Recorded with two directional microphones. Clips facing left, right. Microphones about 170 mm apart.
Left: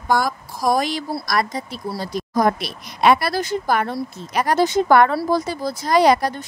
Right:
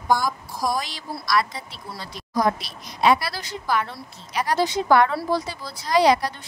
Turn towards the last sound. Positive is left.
turn(degrees=50)  # may be behind; listen again after turning